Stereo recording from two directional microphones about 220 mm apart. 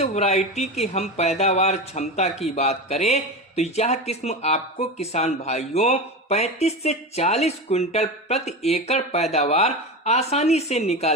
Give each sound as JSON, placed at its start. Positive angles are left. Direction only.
{"t": 0.0, "sound": "speech", "side_deg": 30}